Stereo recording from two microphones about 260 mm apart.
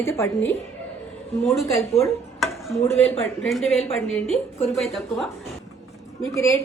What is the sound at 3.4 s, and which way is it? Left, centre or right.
A woman's voice, centre.